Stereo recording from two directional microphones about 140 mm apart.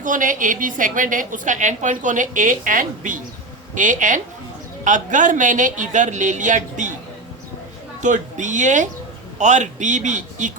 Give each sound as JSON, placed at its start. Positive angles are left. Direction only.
{"t": 0.0, "sound": "a woman's voice", "side_deg": -70}
{"t": 8.0, "sound": "a man's voice", "side_deg": -60}